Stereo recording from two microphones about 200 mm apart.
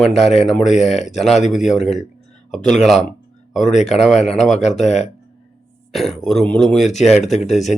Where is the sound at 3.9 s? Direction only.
Centre (ahead or behind).